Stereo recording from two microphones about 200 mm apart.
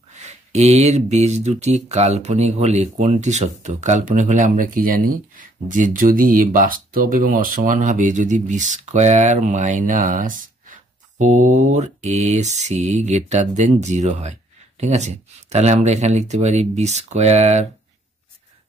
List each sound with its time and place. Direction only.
0.1 s speech: 35° right (ahead or behind)